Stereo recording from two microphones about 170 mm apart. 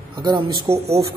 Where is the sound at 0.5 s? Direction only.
35° right (ahead or behind).